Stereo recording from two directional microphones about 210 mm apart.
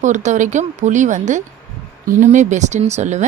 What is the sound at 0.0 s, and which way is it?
A woman's voice, 35° right (ahead or behind).